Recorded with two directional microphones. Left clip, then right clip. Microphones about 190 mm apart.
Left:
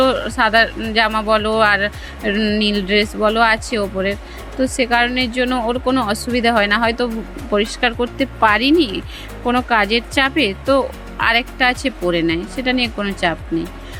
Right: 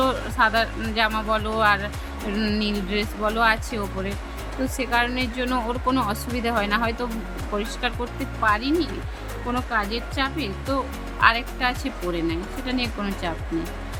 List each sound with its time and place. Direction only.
0.0 s speech: 25° left (ahead or behind)
2.6 s speech: 30° left (ahead or behind)